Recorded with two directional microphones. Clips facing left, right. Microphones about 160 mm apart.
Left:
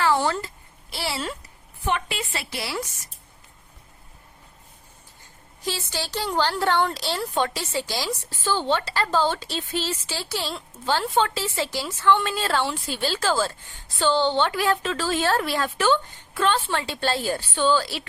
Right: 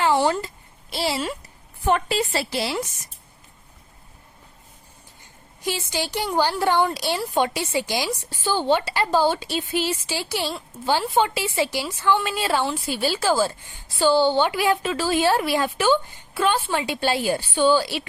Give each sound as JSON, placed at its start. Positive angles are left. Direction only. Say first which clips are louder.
{"t": 0.0, "sound": "a sound", "louder": "right 2 dB", "side_deg": -15}
{"t": 1.8, "sound": "a woman's voice", "louder": "right 6 dB", "side_deg": -40}
{"t": 5.6, "sound": "a woman's voice", "louder": "right 3 dB", "side_deg": -15}